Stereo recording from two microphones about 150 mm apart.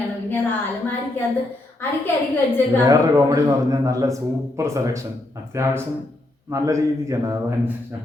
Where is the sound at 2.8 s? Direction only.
20° right (ahead or behind).